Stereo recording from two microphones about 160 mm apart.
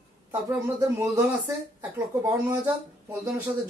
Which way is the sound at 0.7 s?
15° right (ahead or behind).